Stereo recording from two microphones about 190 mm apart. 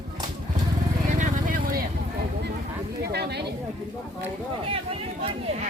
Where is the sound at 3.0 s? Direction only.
60° right (ahead or behind).